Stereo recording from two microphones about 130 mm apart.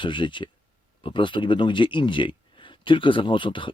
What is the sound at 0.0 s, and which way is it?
Speech, 40° left (ahead or behind).